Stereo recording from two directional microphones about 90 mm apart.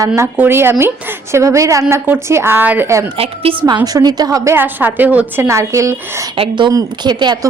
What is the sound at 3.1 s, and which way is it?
Speech, 90° right.